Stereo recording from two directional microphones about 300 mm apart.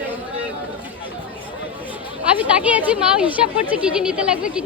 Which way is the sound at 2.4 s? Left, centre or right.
Centre.